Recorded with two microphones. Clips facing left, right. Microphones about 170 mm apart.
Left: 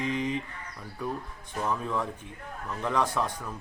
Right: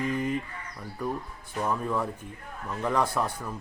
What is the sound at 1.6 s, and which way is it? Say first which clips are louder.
A man's voice: right 2 dB; 10° right (ahead or behind).